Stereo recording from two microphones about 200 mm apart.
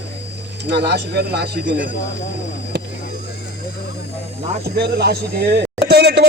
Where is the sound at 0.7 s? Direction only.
55° right (ahead or behind).